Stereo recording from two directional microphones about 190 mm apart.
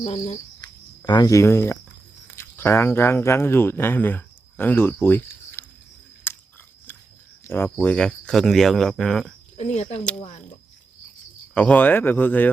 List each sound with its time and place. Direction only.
0.0 s speech: 30° left (ahead or behind); by 5.6 s 10° left (ahead or behind)
6.3 s biting: 10° left (ahead or behind)
6.9 s a sound: 10° left (ahead or behind)
7.4 s speech: 10° left (ahead or behind)
9.6 s speech: 35° left (ahead or behind)
11.5 s speech: 5° left (ahead or behind)